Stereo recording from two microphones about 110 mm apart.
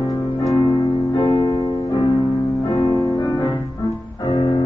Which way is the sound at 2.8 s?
30° left (ahead or behind).